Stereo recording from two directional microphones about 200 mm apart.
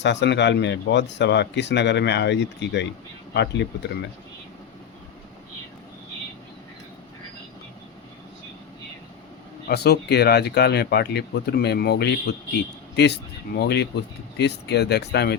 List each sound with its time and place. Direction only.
0.0 s speech: 60° left (ahead or behind)
9.6 s speech: 55° left (ahead or behind)